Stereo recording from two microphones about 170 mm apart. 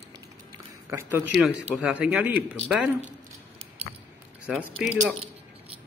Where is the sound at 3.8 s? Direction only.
35° right (ahead or behind).